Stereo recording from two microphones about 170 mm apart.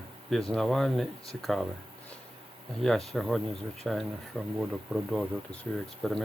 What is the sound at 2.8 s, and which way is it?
Speech, centre (ahead or behind).